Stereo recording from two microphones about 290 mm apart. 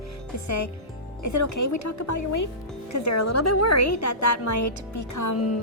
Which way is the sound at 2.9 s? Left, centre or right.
Left.